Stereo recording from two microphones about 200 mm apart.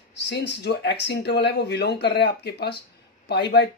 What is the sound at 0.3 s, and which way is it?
Speech, 55° left (ahead or behind).